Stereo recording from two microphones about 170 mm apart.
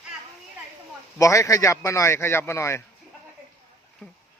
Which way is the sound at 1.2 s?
20° left (ahead or behind).